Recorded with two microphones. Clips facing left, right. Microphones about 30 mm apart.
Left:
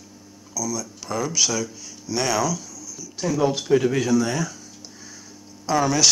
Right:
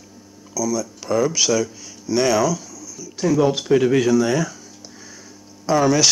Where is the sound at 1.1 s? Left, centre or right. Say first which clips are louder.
Right 5 dB; centre.